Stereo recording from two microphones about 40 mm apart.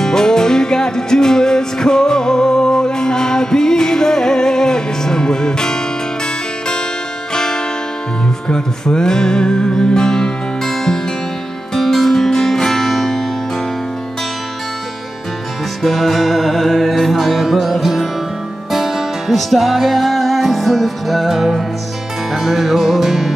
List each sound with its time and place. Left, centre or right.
0.0 s music: centre
7.3 s music: centre
15.8 s music: centre